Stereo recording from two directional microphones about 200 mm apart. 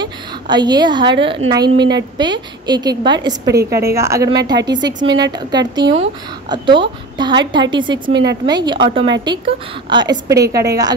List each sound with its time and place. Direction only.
0.0 s a sound: 20° right (ahead or behind)
1.5 s a woman's voice: 20° right (ahead or behind)
8.1 s a woman's voice: 60° right (ahead or behind)
8.5 s a woman's voice: 20° right (ahead or behind)